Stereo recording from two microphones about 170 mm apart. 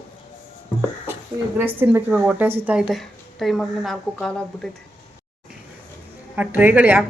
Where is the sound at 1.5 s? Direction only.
10° right (ahead or behind); by 4.7 s 5° left (ahead or behind).